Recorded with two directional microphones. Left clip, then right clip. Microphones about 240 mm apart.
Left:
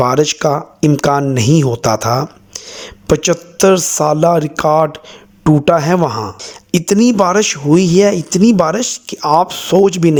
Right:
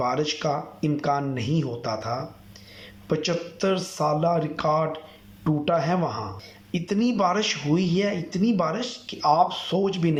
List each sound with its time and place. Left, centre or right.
0.0 s speech: left